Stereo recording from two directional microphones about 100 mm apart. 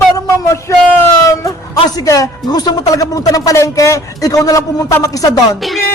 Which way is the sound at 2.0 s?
35° left (ahead or behind).